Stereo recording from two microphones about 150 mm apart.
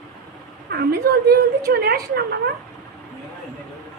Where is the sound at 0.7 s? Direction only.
90° right.